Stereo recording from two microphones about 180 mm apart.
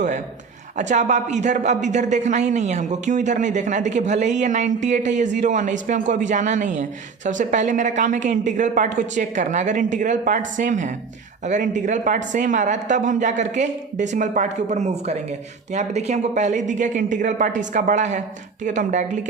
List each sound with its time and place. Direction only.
0.8 s a man's voice: 40° right (ahead or behind)